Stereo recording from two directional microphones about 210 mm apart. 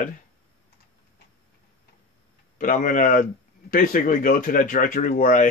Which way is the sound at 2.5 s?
40° left (ahead or behind).